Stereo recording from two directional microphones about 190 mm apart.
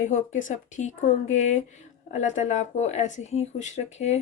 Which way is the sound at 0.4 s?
40° left (ahead or behind).